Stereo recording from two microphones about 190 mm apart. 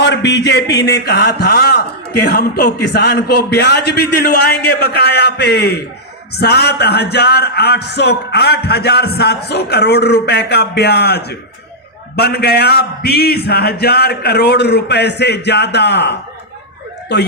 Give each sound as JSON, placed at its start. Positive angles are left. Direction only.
{"t": 0.0, "sound": "a man's voice", "side_deg": 65}